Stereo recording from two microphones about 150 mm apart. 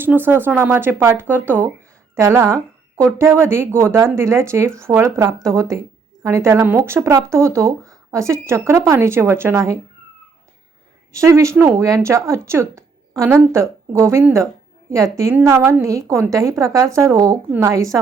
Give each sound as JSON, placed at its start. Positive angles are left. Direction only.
{"t": 0.0, "sound": "speech", "side_deg": -15}
{"t": 11.1, "sound": "speech", "side_deg": -20}